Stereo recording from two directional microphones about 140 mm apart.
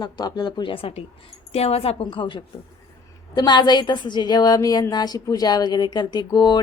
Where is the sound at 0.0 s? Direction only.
30° left (ahead or behind).